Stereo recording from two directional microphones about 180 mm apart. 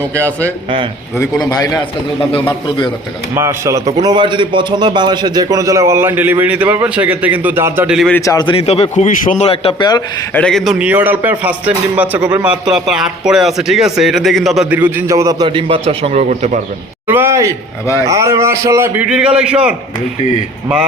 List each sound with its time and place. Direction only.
1.5 s a man's voice: 20° left (ahead or behind)
3.3 s a man's voice: 15° right (ahead or behind)
7.9 s a man's voice: 5° left (ahead or behind)
8.2 s a man's voice: 20° left (ahead or behind); by 9.5 s 45° left (ahead or behind)
9.5 s a man's voice: 30° left (ahead or behind)
10.3 s a man's voice: 5° left (ahead or behind); by 16.6 s 40° right (ahead or behind)
17.1 s a man's voice: 15° right (ahead or behind)